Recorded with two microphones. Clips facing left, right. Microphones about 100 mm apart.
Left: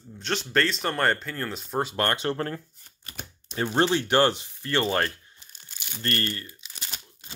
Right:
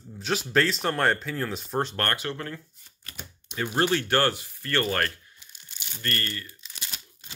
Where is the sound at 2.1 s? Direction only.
35° left (ahead or behind).